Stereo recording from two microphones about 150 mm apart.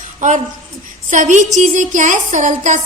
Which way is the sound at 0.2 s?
55° right (ahead or behind).